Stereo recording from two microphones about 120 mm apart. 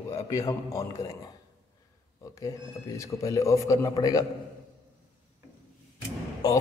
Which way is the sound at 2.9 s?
25° left (ahead or behind).